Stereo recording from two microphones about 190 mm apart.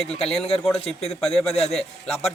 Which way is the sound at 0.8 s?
35° left (ahead or behind).